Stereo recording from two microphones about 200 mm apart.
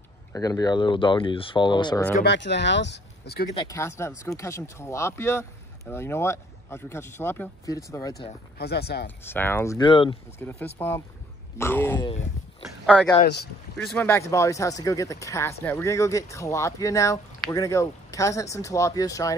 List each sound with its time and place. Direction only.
0.3 s speech: 20° left (ahead or behind)
2.2 s speech: 60° left (ahead or behind)
3.5 s speech: 15° left (ahead or behind)
8.5 s speech: 55° left (ahead or behind)
9.2 s speech: 10° left (ahead or behind)
9.8 s speech: 25° left (ahead or behind)
10.4 s speech: 10° left (ahead or behind)
12.1 s a sound: 30° left (ahead or behind)
12.8 s speech: 5° left (ahead or behind)